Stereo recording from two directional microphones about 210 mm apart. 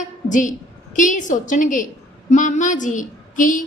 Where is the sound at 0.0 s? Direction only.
35° left (ahead or behind).